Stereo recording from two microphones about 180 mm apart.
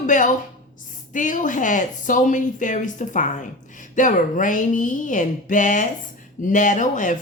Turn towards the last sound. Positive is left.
turn(degrees=45)  # may be behind; listen again after turning